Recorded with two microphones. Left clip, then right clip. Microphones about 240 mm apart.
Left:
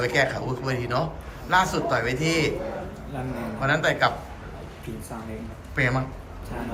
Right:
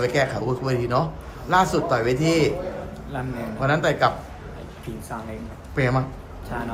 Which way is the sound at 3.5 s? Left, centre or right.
Centre.